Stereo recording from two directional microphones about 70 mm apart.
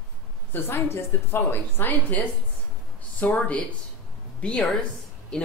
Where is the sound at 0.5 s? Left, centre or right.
Left.